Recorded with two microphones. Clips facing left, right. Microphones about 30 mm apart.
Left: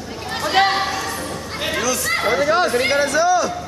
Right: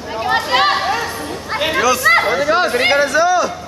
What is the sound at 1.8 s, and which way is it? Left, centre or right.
Chatter, right.